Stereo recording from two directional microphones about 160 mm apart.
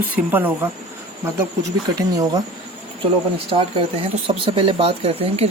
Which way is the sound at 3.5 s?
35° right (ahead or behind).